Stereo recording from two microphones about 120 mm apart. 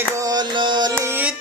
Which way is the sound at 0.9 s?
20° right (ahead or behind).